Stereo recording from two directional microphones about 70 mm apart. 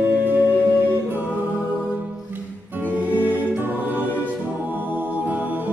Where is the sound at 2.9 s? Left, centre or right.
Right.